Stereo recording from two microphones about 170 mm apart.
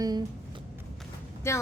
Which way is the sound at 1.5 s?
15° left (ahead or behind).